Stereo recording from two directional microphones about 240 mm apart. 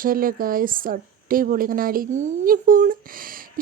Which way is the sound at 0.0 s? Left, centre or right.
Right.